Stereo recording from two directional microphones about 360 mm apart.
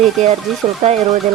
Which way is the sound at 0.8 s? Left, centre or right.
Centre.